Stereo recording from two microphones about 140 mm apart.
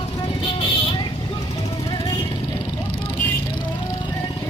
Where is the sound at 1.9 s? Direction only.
35° left (ahead or behind).